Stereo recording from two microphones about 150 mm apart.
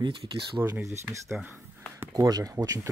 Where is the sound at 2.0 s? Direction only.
25° right (ahead or behind).